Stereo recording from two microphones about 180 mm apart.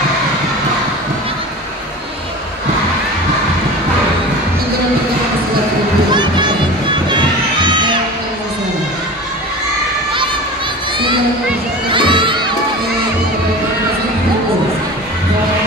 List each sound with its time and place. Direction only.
6.1 s music: 25° right (ahead or behind)
7.1 s children shouting: 25° right (ahead or behind)
11.9 s crowd: 25° right (ahead or behind)